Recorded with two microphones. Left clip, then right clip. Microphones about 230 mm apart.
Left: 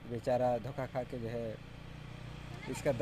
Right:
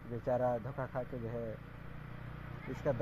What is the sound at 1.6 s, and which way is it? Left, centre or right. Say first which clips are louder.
Vehicle: even; left.